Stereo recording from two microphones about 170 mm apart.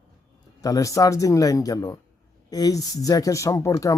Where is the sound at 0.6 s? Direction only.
20° left (ahead or behind).